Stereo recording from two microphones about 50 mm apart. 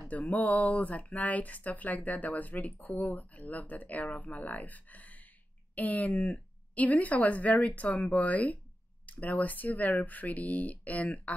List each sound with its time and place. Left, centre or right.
0.2 s speech: left